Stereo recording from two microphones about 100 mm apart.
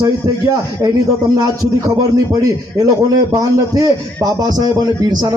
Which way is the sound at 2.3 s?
35° right (ahead or behind).